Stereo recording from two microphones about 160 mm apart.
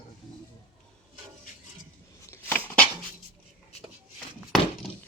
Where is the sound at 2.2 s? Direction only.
15° left (ahead or behind).